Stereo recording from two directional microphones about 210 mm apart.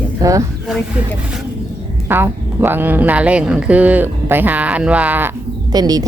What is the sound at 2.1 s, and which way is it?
Speech, 10° right (ahead or behind).